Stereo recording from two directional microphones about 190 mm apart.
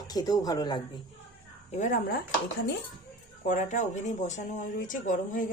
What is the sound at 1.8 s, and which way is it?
Speech, 45° left (ahead or behind).